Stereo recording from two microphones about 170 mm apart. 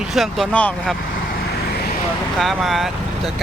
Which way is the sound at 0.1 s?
Centre (ahead or behind).